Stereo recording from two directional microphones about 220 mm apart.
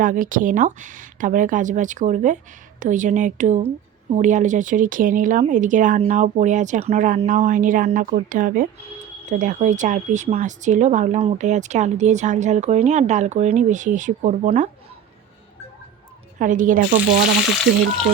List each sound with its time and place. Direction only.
0.0 s speech: 40° right (ahead or behind)
16.4 s speech: 35° right (ahead or behind)